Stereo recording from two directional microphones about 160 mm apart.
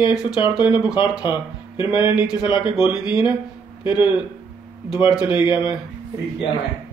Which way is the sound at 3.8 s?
30° left (ahead or behind).